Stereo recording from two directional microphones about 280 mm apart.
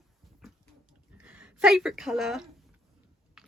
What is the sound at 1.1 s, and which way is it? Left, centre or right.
Speech, centre.